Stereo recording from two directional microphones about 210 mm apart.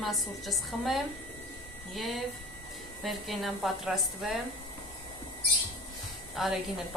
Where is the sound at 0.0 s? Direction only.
Centre (ahead or behind).